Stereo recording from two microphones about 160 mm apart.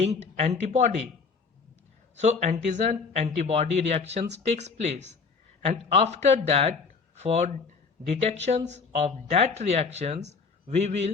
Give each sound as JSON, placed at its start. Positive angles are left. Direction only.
{"t": 0.0, "sound": "speech", "side_deg": -45}
{"t": 2.1, "sound": "speech", "side_deg": -45}